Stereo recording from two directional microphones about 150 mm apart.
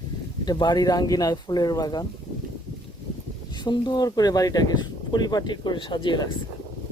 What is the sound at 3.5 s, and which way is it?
Speech, 30° left (ahead or behind).